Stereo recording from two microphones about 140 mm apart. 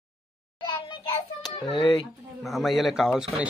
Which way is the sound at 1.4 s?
30° left (ahead or behind).